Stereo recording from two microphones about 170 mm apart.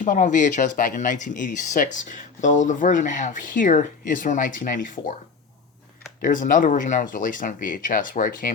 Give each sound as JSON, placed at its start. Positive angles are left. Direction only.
{"t": 0.0, "sound": "speech", "side_deg": 50}
{"t": 6.2, "sound": "speech", "side_deg": 50}